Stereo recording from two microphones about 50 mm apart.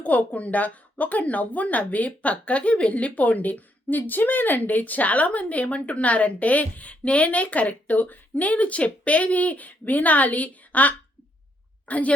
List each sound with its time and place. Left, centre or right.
0.0 s speech: left